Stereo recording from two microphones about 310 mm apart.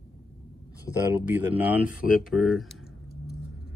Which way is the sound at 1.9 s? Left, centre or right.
Left.